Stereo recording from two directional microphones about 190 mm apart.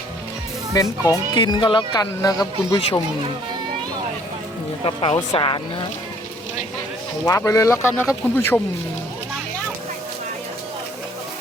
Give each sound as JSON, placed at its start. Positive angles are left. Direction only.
{"t": 0.7, "sound": "speech", "side_deg": 15}
{"t": 4.8, "sound": "speech", "side_deg": 30}
{"t": 7.3, "sound": "speech", "side_deg": 15}